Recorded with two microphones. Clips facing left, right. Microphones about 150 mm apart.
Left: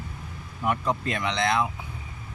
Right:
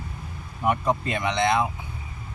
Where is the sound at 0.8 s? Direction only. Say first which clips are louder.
Right 2 dB; 45° right (ahead or behind).